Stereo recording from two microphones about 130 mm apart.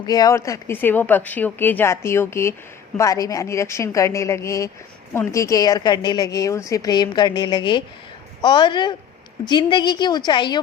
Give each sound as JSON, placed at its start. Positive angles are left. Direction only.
{"t": 0.0, "sound": "a woman's voice", "side_deg": 30}